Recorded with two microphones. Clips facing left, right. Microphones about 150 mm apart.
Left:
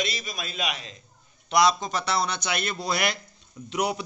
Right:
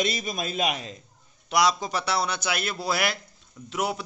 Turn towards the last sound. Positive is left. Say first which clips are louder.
# left 1 dB
turn(degrees=0)  # may be behind; listen again after turning